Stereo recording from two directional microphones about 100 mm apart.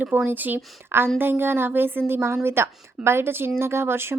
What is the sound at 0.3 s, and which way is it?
A woman's voice, 20° right (ahead or behind).